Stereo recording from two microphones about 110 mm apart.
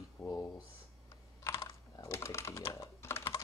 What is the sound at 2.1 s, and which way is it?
Computer keyboard, 25° left (ahead or behind).